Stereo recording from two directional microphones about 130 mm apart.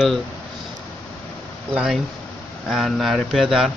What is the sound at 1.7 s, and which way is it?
Speech, 5° right (ahead or behind).